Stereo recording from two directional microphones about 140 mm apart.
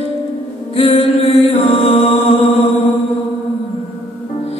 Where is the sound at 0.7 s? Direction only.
45° left (ahead or behind).